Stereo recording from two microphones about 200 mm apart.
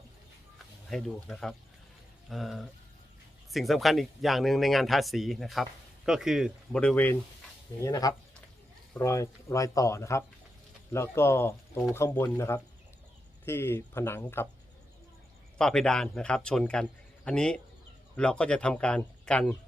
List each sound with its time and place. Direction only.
0.9 s speech: centre (ahead or behind)
15.5 s speech: 5° left (ahead or behind)